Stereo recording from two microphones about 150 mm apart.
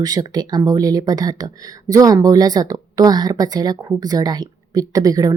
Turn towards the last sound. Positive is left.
turn(degrees=-25)  # may be behind; listen again after turning